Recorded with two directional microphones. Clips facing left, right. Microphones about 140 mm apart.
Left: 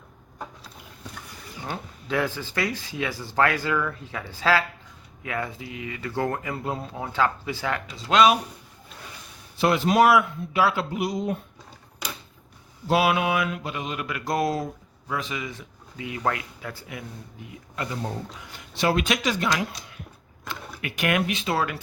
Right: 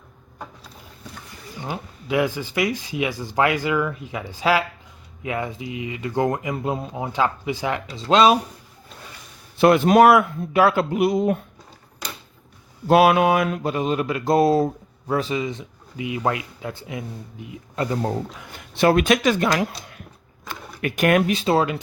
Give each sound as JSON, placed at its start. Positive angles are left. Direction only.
{"t": 1.5, "sound": "speech", "side_deg": -15}
{"t": 8.1, "sound": "speech", "side_deg": -30}
{"t": 9.6, "sound": "a man's voice", "side_deg": -55}
{"t": 12.9, "sound": "mantra", "side_deg": -50}
{"t": 18.0, "sound": "a man's voice", "side_deg": -55}
{"t": 20.8, "sound": "speech", "side_deg": -45}